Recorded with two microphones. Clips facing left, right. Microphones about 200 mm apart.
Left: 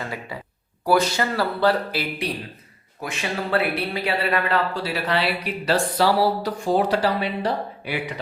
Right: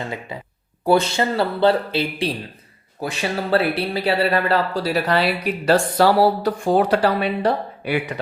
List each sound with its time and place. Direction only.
0.0 s speech: 20° right (ahead or behind); by 7.9 s 60° right (ahead or behind)